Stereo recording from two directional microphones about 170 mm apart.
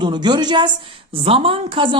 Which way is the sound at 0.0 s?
25° right (ahead or behind).